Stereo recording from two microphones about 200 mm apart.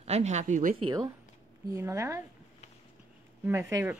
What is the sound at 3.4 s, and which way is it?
Speech, 10° right (ahead or behind).